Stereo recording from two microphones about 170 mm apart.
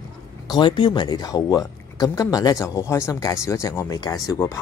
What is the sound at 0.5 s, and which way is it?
Speech, 25° left (ahead or behind).